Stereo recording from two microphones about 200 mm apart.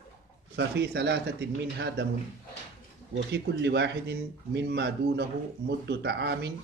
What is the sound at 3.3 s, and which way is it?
Speech, 60° right (ahead or behind).